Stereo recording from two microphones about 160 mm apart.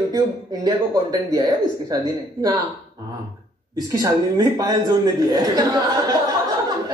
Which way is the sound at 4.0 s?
25° right (ahead or behind).